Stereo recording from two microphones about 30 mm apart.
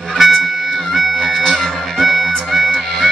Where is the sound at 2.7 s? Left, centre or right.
Centre.